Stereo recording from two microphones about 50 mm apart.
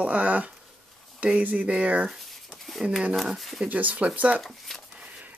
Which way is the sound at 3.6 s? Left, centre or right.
Right.